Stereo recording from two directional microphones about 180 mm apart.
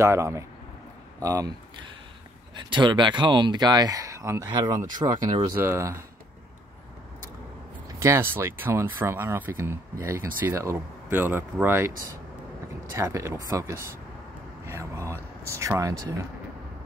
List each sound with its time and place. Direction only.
0.0 s speech: 15° right (ahead or behind)
8.0 s speech: 15° right (ahead or behind)
12.9 s speech: 15° right (ahead or behind)
14.7 s a sound: 15° right (ahead or behind)
15.4 s speech: 15° right (ahead or behind)